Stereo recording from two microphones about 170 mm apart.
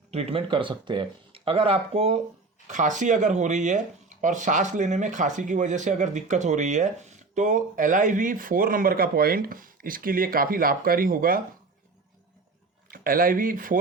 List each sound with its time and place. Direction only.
0.1 s speech: 35° right (ahead or behind); by 11.4 s 55° right (ahead or behind)
12.9 s speech: 55° right (ahead or behind)